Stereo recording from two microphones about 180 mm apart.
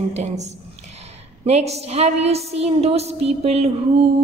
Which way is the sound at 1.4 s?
35° right (ahead or behind).